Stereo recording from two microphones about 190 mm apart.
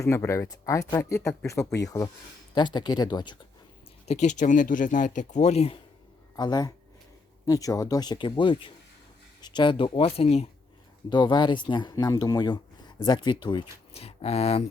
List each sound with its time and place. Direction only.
0.0 s speech: 15° left (ahead or behind)
4.0 s speech: 35° left (ahead or behind)
6.3 s speech: 20° left (ahead or behind)